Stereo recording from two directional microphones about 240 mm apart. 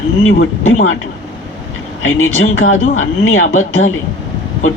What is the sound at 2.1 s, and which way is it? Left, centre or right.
Speech, left.